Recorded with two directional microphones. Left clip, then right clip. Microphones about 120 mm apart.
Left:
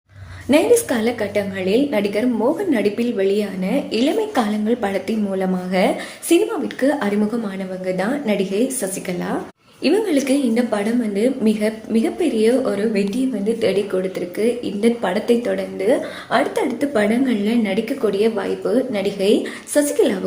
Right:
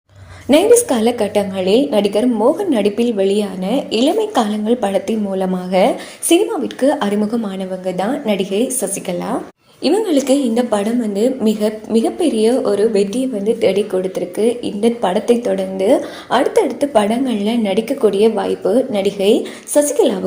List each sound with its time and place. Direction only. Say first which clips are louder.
0.5 s a woman's voice: right 4 dB; 35° right (ahead or behind)
1.0 s a woman's voice: right 5 dB; 60° right (ahead or behind)
1.6 s a woman's voice: right 5 dB; 45° right (ahead or behind); by 12.8 s 25° right (ahead or behind)
12.9 s a woman's voice: right 5 dB; 35° right (ahead or behind)
15.8 s a woman's voice: right 4 dB; 40° right (ahead or behind)